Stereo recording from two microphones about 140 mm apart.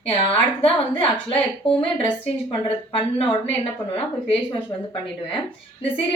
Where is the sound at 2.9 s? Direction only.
40° left (ahead or behind).